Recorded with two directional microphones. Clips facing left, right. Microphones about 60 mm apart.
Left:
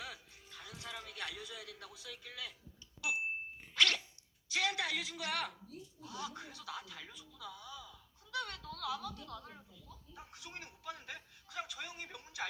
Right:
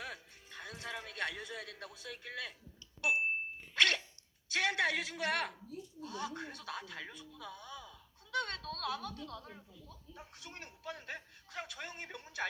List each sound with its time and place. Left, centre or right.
0.0 s music: right
3.0 s a sound: right
3.8 s sneeze: right
4.5 s a woman's voice: right
10.3 s speech: right